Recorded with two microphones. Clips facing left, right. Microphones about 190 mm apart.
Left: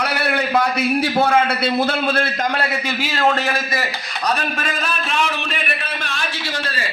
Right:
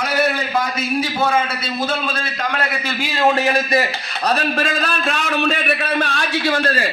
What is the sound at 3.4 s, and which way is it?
Speech, 25° right (ahead or behind).